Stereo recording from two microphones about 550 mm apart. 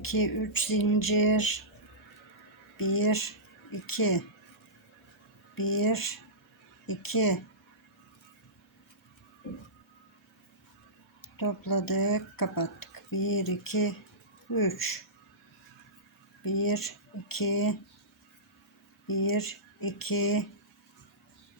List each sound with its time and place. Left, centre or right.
0.0 s speech: left
2.7 s speech: left
5.5 s speech: left
11.3 s speech: left
16.4 s speech: left
19.2 s speech: left